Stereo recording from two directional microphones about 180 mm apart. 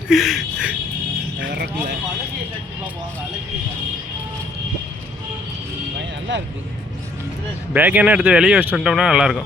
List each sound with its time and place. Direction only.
0.1 s a sound: centre (ahead or behind)
1.4 s speech: 70° right (ahead or behind)
6.0 s vehicle: 80° right
7.7 s speech: 10° right (ahead or behind)